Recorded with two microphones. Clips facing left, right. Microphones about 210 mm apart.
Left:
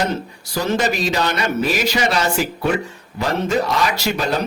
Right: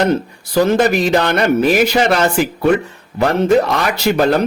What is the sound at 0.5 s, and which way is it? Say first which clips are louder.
A man's voice: right 7 dB; 55° right (ahead or behind).